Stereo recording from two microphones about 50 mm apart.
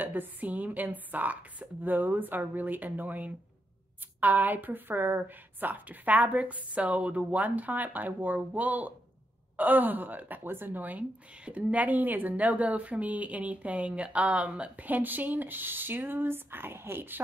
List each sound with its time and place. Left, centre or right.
0.0 s speech: right
14.9 s speech: right